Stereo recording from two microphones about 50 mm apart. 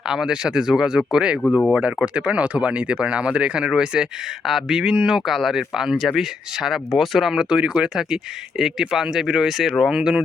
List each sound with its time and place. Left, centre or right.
0.0 s speech: centre
5.2 s speech: centre
9.5 s speech: centre
9.9 s speech: centre